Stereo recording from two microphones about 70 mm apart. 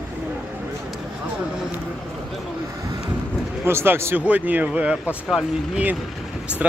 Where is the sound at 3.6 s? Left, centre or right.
Right.